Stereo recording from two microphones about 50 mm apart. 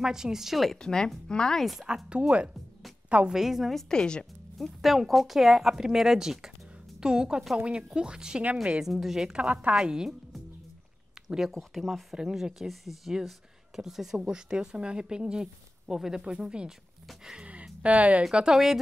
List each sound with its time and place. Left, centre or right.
0.0 s speech: centre
0.7 s speech: centre
1.6 s speech: centre
2.0 s speech: right
3.3 s speech: centre
3.9 s speech: centre
4.6 s speech: centre
8.8 s speech: centre
9.4 s speech: right
9.8 s speech: centre
11.2 s speech: centre
12.2 s speech: centre
17.8 s speech: right
18.3 s speech: centre